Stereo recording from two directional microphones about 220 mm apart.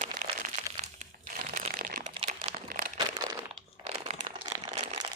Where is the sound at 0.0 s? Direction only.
35° right (ahead or behind).